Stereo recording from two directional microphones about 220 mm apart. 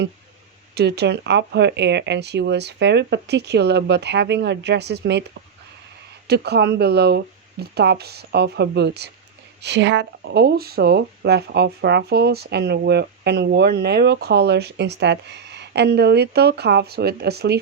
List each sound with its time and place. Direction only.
0.7 s speech: 50° right (ahead or behind)
6.2 s speech: 50° right (ahead or behind)